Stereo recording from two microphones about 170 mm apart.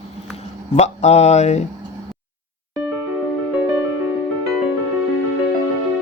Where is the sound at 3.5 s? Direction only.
10° right (ahead or behind).